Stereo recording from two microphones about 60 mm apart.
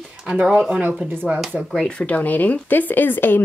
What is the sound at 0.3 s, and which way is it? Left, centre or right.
Speech, right.